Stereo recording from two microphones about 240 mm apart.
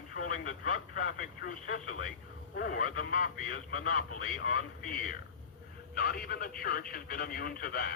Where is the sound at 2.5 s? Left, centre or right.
Left.